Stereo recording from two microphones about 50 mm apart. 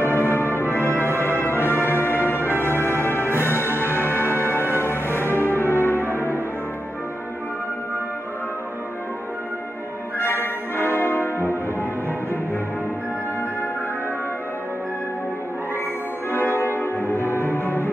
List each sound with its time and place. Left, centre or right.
0.0 s music: left
10.1 s music: left
16.3 s music: left